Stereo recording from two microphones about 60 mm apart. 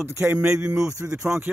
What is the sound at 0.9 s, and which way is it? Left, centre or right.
Speech, right.